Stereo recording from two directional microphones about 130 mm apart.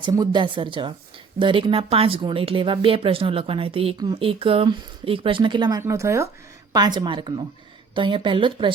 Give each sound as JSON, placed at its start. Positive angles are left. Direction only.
{"t": 0.0, "sound": "speech", "side_deg": -35}
{"t": 3.9, "sound": "speech", "side_deg": -30}
{"t": 4.2, "sound": "speech", "side_deg": -45}
{"t": 5.8, "sound": "speech", "side_deg": -25}